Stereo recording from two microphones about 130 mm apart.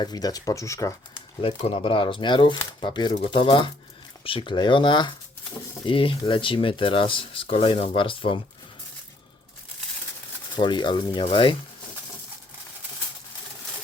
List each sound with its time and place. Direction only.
0.0 s speech: 30° left (ahead or behind)
1.4 s speech: 45° left (ahead or behind)
10.5 s speech: 35° left (ahead or behind)